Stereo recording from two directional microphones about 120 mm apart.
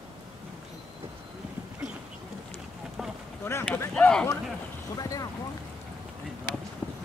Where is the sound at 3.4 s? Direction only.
20° left (ahead or behind).